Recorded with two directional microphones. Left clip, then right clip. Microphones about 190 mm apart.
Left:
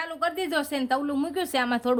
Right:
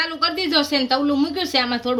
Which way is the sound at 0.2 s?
45° left (ahead or behind).